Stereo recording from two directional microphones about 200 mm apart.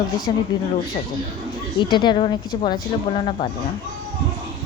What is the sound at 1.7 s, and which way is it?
Speech, 20° left (ahead or behind).